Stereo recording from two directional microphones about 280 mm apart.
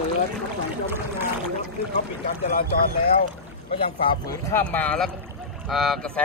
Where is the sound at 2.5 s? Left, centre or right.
Left.